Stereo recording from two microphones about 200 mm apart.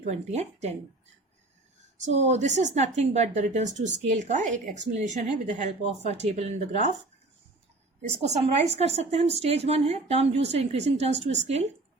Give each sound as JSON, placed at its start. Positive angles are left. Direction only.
{"t": 0.0, "sound": "a woman's voice", "side_deg": -35}
{"t": 2.0, "sound": "a woman's voice", "side_deg": -35}
{"t": 8.3, "sound": "a woman's voice", "side_deg": -30}